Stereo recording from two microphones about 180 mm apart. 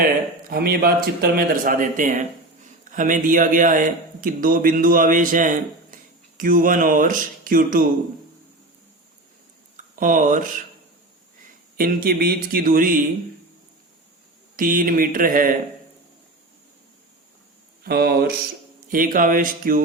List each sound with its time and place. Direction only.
0.0 s speech: 55° right (ahead or behind)
9.7 s speech: 50° right (ahead or behind)
11.8 s speech: 55° right (ahead or behind)
14.5 s speech: 50° right (ahead or behind)
17.8 s speech: 60° right (ahead or behind)
18.9 s speech: 50° right (ahead or behind)